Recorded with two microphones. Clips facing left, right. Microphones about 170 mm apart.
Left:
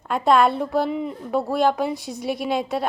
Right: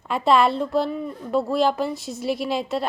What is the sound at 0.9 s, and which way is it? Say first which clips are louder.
Speech: left 3 dB; 15° left (ahead or behind).